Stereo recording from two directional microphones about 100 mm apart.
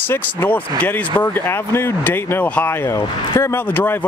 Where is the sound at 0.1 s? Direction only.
20° left (ahead or behind).